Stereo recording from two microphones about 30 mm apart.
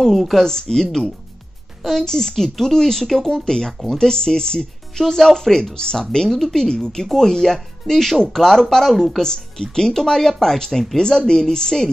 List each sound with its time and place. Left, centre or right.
0.0 s speech: centre
0.5 s a woman's voice: centre
1.9 s speech: centre
3.4 s a woman's voice: left; by 9.2 s centre
9.2 s speech: left
11.0 s a woman's voice: left